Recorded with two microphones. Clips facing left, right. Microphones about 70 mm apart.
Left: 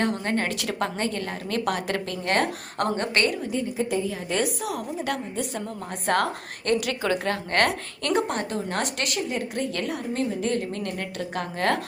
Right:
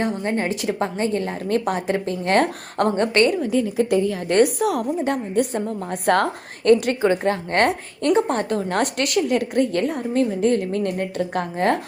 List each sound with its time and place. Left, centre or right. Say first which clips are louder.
0.3 s a woman's voice: right 4 dB; centre; by 3.3 s right
3.5 s a woman's voice: right 7 dB; right
6.1 s a woman's voice: right 5 dB; right
7.1 s a woman's voice: right 5 dB; right
8.3 s a woman's voice: right 6 dB; right
9.7 s a woman's voice: right 7 dB; right
11.5 s a woman's voice: right 4 dB; right